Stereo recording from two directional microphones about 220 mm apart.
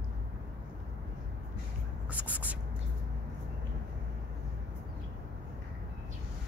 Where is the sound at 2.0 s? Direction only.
5° right (ahead or behind).